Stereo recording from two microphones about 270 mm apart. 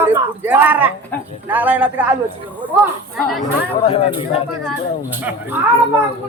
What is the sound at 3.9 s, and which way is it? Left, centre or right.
Speech, left.